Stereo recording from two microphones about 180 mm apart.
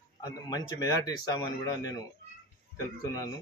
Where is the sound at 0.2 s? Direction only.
20° left (ahead or behind).